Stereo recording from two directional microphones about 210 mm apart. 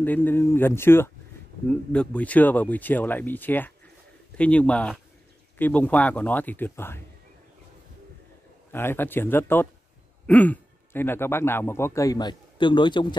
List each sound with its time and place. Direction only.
0.0 s speech: 10° left (ahead or behind)
8.7 s speech: 10° left (ahead or behind)